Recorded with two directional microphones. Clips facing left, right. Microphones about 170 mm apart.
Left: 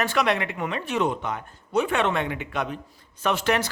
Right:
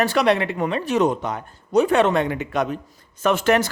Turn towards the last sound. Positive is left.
turn(degrees=-45)  # may be behind; listen again after turning